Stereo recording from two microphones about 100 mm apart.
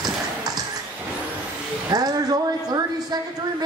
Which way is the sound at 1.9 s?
40° right (ahead or behind).